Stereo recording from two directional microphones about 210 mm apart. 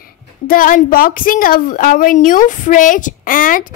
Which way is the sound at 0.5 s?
40° left (ahead or behind).